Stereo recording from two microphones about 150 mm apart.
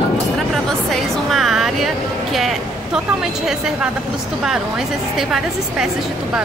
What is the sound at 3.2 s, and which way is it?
A woman's voice, 5° right (ahead or behind).